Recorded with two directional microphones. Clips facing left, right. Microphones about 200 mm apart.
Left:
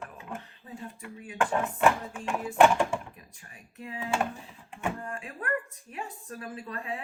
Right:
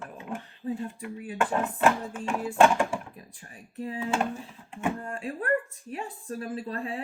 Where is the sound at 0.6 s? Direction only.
30° right (ahead or behind).